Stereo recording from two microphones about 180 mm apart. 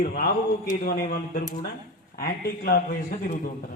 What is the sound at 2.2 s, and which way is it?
Speech, 55° left (ahead or behind).